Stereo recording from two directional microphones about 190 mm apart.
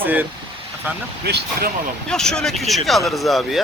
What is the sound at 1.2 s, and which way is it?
Speech, 60° right (ahead or behind).